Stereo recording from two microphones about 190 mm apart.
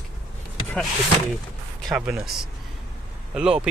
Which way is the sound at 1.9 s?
5° right (ahead or behind).